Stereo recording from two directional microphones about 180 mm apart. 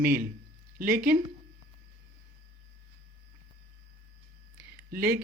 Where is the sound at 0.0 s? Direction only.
55° right (ahead or behind).